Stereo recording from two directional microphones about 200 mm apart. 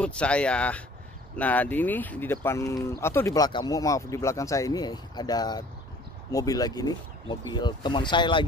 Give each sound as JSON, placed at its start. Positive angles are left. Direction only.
{"t": 0.0, "sound": "speech", "side_deg": 5}